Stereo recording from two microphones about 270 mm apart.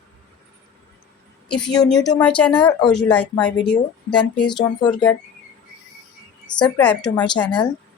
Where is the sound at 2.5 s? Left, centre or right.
Centre.